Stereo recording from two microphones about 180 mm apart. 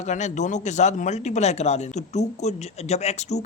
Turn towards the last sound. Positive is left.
turn(degrees=40)  # may be behind; listen again after turning